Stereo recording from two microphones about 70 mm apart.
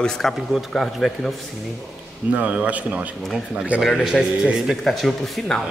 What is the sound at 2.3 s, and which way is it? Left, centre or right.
A man's voice, centre.